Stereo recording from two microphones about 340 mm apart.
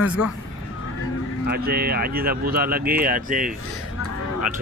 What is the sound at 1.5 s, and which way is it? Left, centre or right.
Speech, right.